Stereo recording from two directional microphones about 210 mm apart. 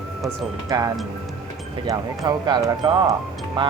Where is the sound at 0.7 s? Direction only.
20° right (ahead or behind).